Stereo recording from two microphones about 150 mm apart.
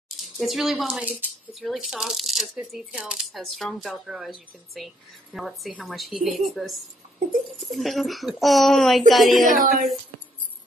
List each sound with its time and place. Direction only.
0.4 s speech: centre (ahead or behind)
9.6 s speech: 75° right (ahead or behind)